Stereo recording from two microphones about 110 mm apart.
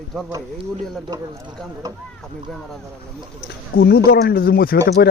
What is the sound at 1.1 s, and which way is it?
Speech, 35° right (ahead or behind).